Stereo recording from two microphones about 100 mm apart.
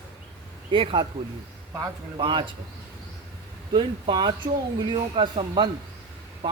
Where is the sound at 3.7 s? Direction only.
50° right (ahead or behind).